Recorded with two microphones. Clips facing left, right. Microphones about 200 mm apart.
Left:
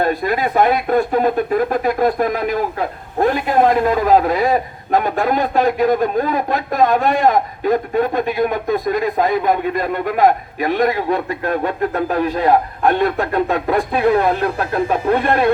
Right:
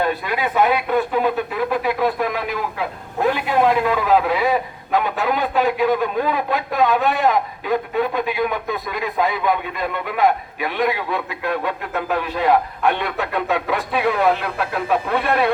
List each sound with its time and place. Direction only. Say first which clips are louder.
0.0 s speech: left 4 dB; 45° left (ahead or behind)